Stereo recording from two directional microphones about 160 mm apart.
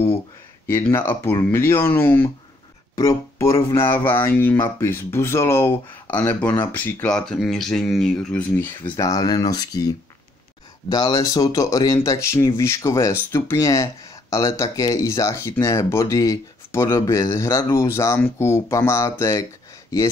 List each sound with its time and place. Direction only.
0.7 s speech: 15° left (ahead or behind)